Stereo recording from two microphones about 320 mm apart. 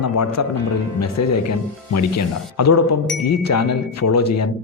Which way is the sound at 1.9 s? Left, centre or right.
Left.